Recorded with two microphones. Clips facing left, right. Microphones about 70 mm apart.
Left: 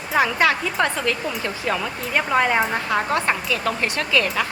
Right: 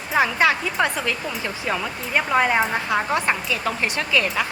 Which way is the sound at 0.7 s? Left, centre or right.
Centre.